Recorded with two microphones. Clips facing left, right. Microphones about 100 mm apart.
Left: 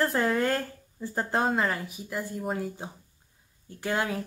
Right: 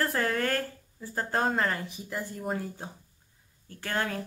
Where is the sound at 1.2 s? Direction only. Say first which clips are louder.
Left 1 dB; 5° left (ahead or behind).